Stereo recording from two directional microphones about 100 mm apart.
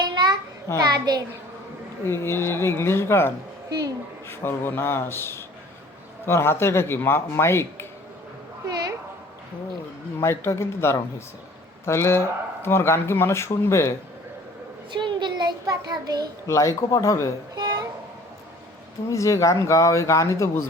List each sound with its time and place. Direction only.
0.0 s a sound: 45° right (ahead or behind)
0.8 s a child's voice: 45° right (ahead or behind)
2.0 s a man's voice: 25° left (ahead or behind)
3.7 s speech: 40° right (ahead or behind)
4.3 s a man's voice: 20° left (ahead or behind)
10.2 s a man's voice: 25° left (ahead or behind)
14.9 s a child's voice: 50° right (ahead or behind)
16.5 s speech: 30° left (ahead or behind)
17.5 s a sound: 50° right (ahead or behind)
19.1 s speech: 30° left (ahead or behind)